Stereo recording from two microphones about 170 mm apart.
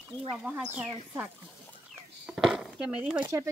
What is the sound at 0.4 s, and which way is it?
Speech, 5° right (ahead or behind).